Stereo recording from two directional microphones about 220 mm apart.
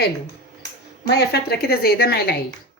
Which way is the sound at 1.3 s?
45° left (ahead or behind).